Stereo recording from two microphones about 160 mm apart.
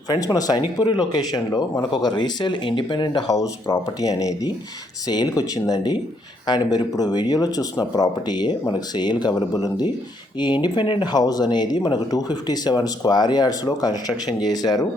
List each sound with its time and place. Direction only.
0.1 s speech: 25° left (ahead or behind)